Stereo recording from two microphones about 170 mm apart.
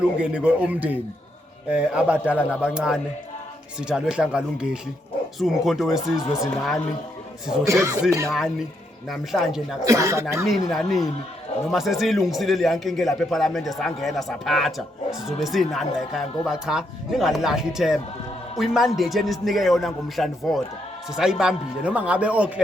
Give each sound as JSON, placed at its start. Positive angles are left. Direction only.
{"t": 0.2, "sound": "a man's voice", "side_deg": -5}
{"t": 7.6, "sound": "speech", "side_deg": -20}
{"t": 8.3, "sound": "a man's voice", "side_deg": -5}
{"t": 9.8, "sound": "speech", "side_deg": -20}
{"t": 10.4, "sound": "a man's voice", "side_deg": 0}